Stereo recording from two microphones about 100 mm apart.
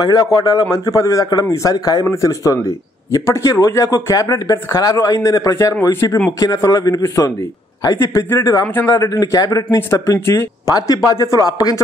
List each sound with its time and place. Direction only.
0.0 s a man's voice: 35° left (ahead or behind)